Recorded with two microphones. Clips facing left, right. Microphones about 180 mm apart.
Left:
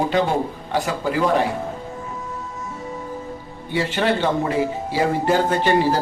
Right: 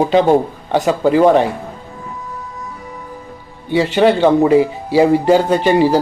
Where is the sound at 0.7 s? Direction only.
20° right (ahead or behind).